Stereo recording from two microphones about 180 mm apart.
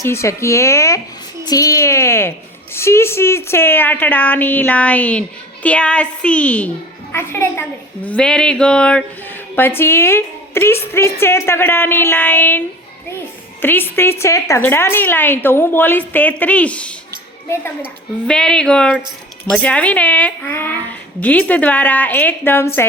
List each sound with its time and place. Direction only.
0.0 s a woman's voice: 15° left (ahead or behind)
18.3 s a woman's voice: 5° left (ahead or behind)